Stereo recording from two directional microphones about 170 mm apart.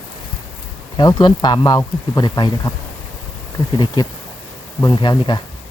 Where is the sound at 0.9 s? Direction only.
25° left (ahead or behind).